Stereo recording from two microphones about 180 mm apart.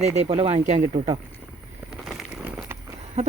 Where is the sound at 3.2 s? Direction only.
40° right (ahead or behind).